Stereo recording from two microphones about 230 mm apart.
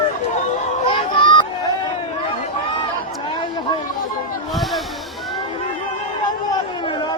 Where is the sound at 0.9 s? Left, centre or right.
Left.